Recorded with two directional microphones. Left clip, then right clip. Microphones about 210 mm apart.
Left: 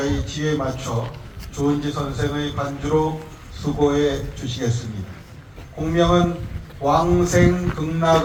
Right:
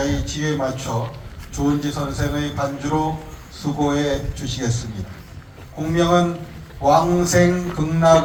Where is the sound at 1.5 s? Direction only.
55° right (ahead or behind).